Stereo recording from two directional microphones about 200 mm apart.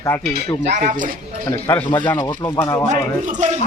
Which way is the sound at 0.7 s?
40° right (ahead or behind).